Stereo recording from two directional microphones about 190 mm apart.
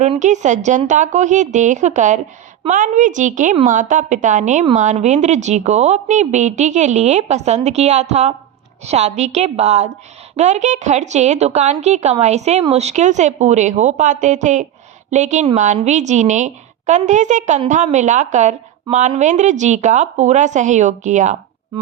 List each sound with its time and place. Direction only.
0.0 s a woman's voice: 40° right (ahead or behind)